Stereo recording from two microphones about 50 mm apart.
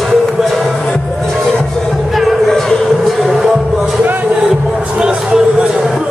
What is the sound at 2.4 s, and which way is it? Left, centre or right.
Music, centre.